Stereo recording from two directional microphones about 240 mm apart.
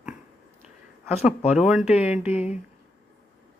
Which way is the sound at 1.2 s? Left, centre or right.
Centre.